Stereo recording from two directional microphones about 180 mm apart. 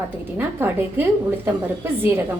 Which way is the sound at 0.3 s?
10° right (ahead or behind).